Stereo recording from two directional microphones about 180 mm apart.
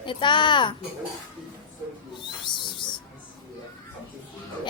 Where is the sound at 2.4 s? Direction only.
25° left (ahead or behind).